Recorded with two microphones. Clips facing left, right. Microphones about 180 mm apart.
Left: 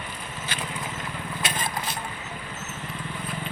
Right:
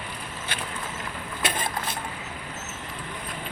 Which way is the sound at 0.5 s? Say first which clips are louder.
Left 1 dB; 60° right (ahead or behind).